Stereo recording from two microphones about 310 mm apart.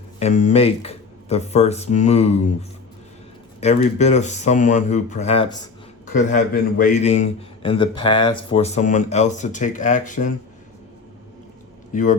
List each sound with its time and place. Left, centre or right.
0.2 s a man's voice: left
11.9 s a man's voice: left